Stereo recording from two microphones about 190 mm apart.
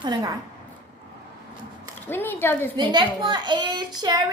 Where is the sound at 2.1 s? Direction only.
10° left (ahead or behind).